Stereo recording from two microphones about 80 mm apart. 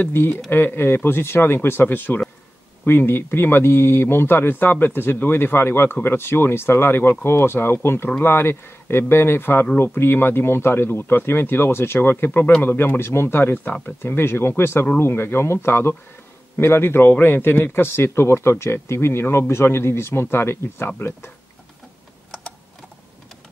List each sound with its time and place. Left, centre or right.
0.0 s speech: left